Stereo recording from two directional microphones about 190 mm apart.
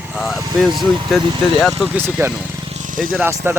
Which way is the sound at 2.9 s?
45° right (ahead or behind).